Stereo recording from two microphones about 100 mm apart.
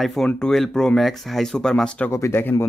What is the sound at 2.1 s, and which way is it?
Speech, 25° left (ahead or behind).